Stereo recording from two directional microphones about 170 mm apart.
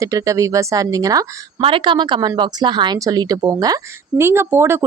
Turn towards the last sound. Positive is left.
turn(degrees=-15)  # may be behind; listen again after turning